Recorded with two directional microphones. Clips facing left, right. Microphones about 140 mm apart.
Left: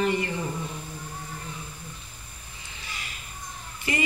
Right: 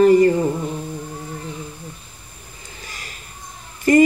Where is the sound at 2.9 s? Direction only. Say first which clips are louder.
Right 2 dB; 40° right (ahead or behind).